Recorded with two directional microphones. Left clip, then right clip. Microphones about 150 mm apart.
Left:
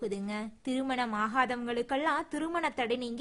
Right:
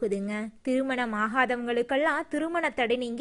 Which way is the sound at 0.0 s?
30° right (ahead or behind).